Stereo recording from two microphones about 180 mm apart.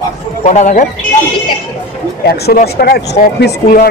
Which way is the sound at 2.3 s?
60° left (ahead or behind).